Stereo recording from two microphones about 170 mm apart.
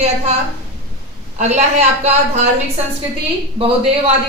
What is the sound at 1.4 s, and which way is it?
Speech, 40° right (ahead or behind).